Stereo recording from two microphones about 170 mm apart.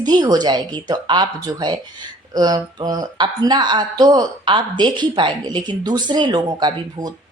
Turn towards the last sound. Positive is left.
turn(degrees=-25)  # may be behind; listen again after turning